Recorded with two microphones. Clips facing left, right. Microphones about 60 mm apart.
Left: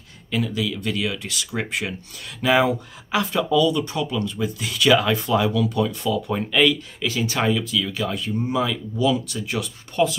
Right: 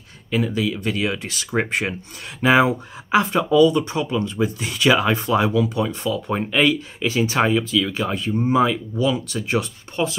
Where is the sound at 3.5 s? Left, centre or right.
Right.